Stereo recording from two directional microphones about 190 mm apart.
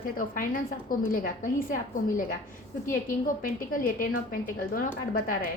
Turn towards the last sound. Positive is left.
turn(degrees=50)  # may be behind; listen again after turning